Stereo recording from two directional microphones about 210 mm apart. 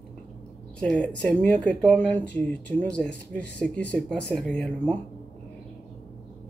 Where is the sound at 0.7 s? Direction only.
5° left (ahead or behind).